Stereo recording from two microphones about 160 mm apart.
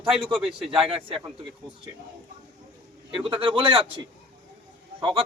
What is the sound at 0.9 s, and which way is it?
Speech, 35° right (ahead or behind).